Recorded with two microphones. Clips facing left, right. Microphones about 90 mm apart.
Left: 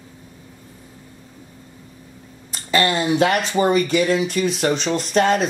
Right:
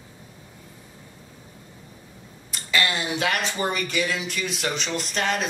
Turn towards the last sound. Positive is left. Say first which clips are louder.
# left 8 dB
turn(degrees=35)  # may be behind; listen again after turning